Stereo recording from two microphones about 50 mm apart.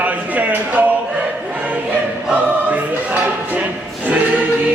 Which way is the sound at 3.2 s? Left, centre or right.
Right.